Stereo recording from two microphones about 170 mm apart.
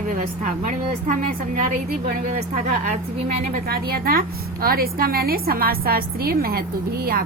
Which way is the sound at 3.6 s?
65° right (ahead or behind).